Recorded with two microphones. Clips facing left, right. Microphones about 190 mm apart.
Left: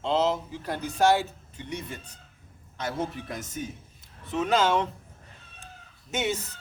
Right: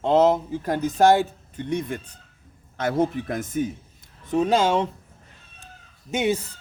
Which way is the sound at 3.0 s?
55° right (ahead or behind).